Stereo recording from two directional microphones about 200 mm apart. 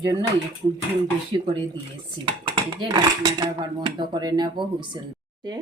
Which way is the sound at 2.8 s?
20° right (ahead or behind).